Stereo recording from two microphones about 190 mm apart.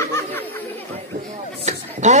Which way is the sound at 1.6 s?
40° right (ahead or behind).